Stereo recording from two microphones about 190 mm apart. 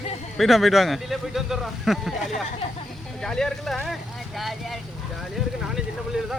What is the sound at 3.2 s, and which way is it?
Speech, 5° left (ahead or behind).